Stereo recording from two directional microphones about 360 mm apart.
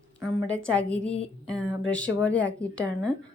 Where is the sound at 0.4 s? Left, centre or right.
Centre.